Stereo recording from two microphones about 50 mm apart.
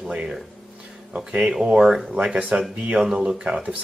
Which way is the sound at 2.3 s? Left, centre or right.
Right.